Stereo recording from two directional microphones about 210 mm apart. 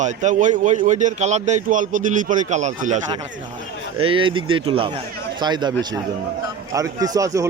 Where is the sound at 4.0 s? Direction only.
25° right (ahead or behind).